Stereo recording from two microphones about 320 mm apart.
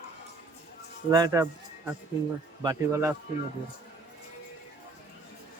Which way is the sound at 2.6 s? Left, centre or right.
Centre.